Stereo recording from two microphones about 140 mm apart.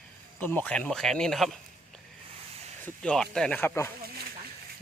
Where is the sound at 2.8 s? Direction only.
5° left (ahead or behind).